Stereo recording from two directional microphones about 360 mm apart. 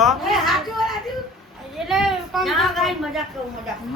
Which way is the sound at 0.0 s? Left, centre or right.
Centre.